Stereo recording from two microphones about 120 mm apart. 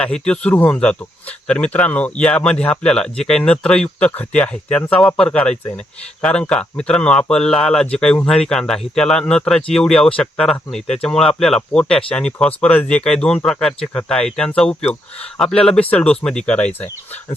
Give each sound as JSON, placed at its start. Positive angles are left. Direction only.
{"t": 0.0, "sound": "speech", "side_deg": 10}